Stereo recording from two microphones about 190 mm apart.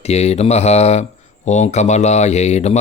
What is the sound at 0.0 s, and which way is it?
Speech, 35° left (ahead or behind).